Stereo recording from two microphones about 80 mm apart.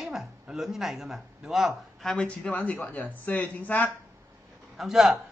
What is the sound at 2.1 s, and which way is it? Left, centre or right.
A man's voice, centre.